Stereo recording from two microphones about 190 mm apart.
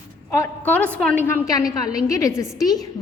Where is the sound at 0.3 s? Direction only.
10° left (ahead or behind).